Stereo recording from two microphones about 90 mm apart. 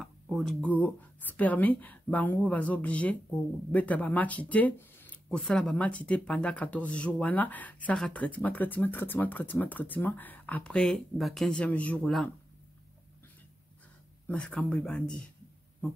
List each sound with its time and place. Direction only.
0.0 s a sound: centre (ahead or behind)
0.6 s a woman's voice: 15° left (ahead or behind)
5.4 s a woman's voice: 5° left (ahead or behind)
10.8 s a woman's voice: centre (ahead or behind)
14.2 s a woman's voice: 15° left (ahead or behind)